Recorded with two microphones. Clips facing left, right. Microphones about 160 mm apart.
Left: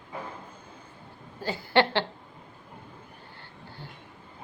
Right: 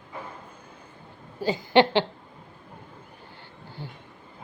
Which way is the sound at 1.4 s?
15° right (ahead or behind).